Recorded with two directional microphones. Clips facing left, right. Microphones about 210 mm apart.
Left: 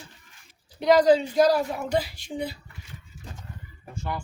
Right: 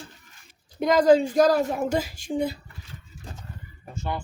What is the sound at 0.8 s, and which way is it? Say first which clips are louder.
Speech: even; 50° right (ahead or behind).